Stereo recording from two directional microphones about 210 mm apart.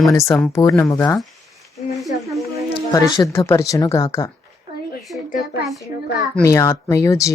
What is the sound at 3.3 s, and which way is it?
Speech, 10° left (ahead or behind).